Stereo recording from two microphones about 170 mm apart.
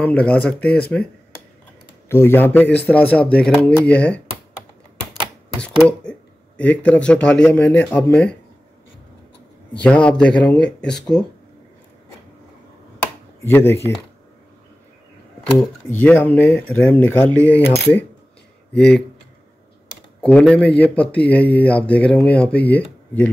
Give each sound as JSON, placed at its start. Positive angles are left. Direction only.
{"t": 0.0, "sound": "speech", "side_deg": 10}
{"t": 2.0, "sound": "speech", "side_deg": 15}
{"t": 5.6, "sound": "speech", "side_deg": 5}
{"t": 9.8, "sound": "speech", "side_deg": 5}
{"t": 13.4, "sound": "speech", "side_deg": 10}
{"t": 15.9, "sound": "speech", "side_deg": 10}
{"t": 17.3, "sound": "speech", "side_deg": -15}
{"t": 18.7, "sound": "speech", "side_deg": 75}
{"t": 20.2, "sound": "speech", "side_deg": 5}